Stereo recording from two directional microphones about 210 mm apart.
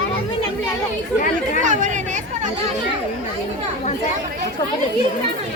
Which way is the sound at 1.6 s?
35° right (ahead or behind).